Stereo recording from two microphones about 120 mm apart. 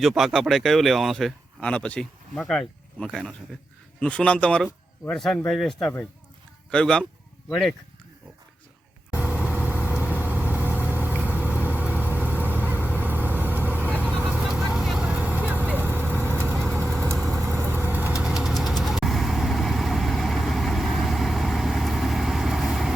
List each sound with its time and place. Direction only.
0.0 s speech: 5° right (ahead or behind)
9.0 s vehicle: 15° right (ahead or behind)
17.2 s vehicle: centre (ahead or behind)
17.4 s vehicle: 20° right (ahead or behind)
18.2 s vehicle: 5° right (ahead or behind)